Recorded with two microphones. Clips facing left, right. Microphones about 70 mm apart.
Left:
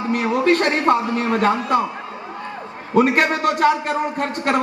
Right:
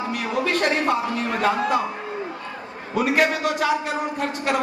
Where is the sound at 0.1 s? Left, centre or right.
Left.